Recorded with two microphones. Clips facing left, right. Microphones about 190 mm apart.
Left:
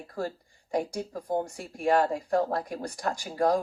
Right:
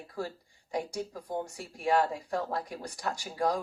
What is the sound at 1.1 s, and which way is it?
Speech, 40° left (ahead or behind).